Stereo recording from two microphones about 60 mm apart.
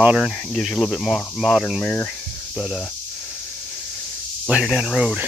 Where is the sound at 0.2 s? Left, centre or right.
Centre.